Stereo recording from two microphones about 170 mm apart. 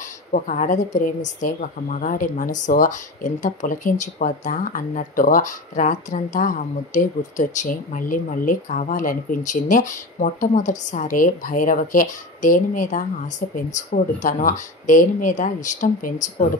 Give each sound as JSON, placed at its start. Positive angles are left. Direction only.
{"t": 0.3, "sound": "a woman's voice", "side_deg": 50}